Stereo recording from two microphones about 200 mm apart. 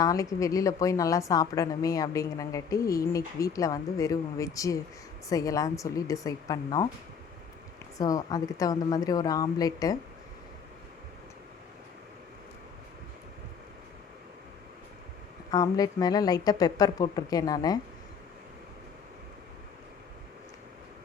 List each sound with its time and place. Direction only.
0.0 s a woman's voice: 15° left (ahead or behind)
7.9 s speech: 15° left (ahead or behind)
15.4 s speech: 20° left (ahead or behind)